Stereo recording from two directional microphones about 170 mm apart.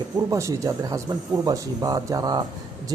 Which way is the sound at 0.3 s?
20° right (ahead or behind).